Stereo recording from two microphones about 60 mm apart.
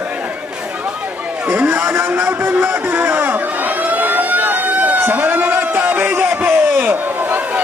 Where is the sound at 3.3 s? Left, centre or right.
Right.